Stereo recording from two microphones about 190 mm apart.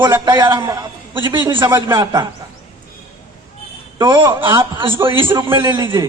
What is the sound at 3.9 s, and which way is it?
Speech, 20° right (ahead or behind).